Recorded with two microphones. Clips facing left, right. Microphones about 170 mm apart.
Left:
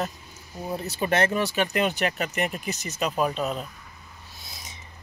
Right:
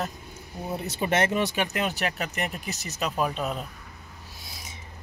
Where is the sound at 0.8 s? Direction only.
20° right (ahead or behind).